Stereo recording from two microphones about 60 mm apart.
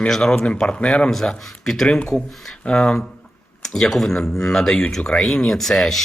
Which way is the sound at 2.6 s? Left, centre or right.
Centre.